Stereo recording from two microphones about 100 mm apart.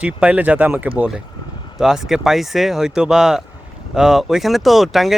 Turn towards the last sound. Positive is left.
turn(degrees=0)  # may be behind; listen again after turning